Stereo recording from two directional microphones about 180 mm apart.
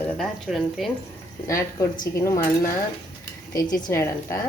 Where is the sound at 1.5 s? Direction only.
20° left (ahead or behind).